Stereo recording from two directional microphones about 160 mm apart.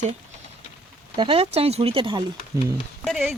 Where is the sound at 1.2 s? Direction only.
35° right (ahead or behind).